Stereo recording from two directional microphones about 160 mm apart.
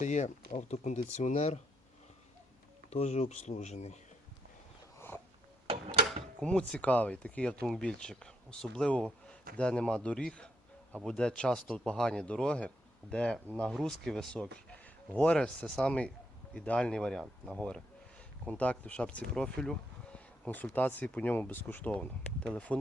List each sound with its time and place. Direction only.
0.0 s speech: 50° left (ahead or behind)
2.9 s speech: 45° left (ahead or behind)
4.9 s a sound: 15° left (ahead or behind)
6.4 s speech: 5° left (ahead or behind)